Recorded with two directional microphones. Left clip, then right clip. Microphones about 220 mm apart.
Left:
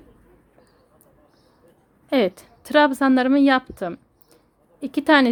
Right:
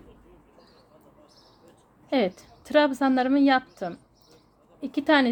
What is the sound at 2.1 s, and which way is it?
Speech, 25° left (ahead or behind).